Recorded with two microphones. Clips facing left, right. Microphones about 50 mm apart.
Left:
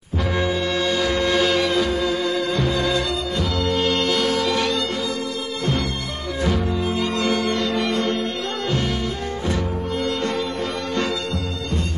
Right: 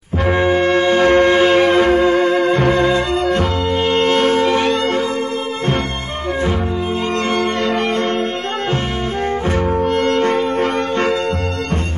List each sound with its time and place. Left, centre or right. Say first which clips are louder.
0.3 s music: right 9 dB; right
7.2 s organ: right 5 dB; right
9.9 s music: right 5 dB; right